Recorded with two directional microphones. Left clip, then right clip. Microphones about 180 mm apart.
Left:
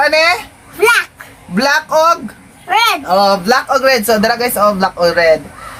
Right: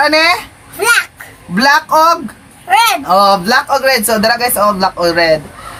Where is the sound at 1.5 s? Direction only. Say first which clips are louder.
Right 3 dB; 5° left (ahead or behind).